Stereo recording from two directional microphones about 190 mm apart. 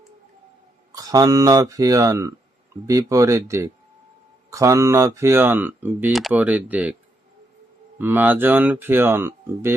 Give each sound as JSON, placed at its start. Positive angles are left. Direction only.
{"t": 0.9, "sound": "speech", "side_deg": -20}
{"t": 7.9, "sound": "speech", "side_deg": -10}